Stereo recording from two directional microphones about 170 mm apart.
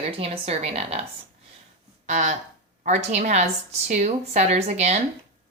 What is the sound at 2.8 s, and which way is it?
Speech, 45° right (ahead or behind).